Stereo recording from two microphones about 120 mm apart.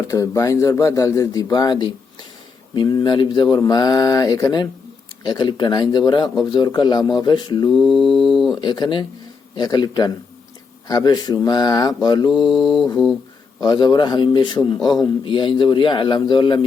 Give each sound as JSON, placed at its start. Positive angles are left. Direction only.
{"t": 0.1, "sound": "speech", "side_deg": 25}
{"t": 7.7, "sound": "mantra", "side_deg": 0}
{"t": 8.5, "sound": "speech", "side_deg": 35}
{"t": 12.3, "sound": "mantra", "side_deg": 0}
{"t": 13.6, "sound": "speech", "side_deg": 35}